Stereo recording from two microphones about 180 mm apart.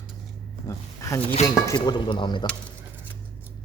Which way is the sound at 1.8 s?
25° left (ahead or behind).